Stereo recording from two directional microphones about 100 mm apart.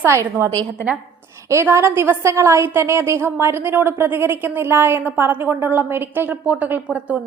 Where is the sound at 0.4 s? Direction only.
25° right (ahead or behind).